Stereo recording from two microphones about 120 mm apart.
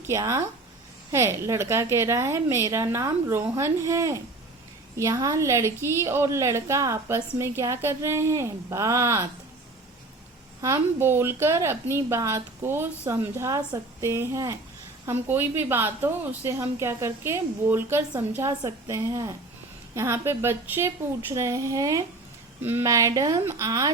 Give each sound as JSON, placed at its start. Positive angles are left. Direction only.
{"t": 0.1, "sound": "a woman's voice", "side_deg": -25}
{"t": 10.6, "sound": "a woman's voice", "side_deg": -20}